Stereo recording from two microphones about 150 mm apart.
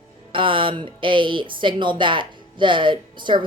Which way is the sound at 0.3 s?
35° right (ahead or behind).